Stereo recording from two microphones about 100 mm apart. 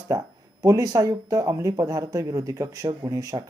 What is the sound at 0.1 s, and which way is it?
Speech, 35° right (ahead or behind).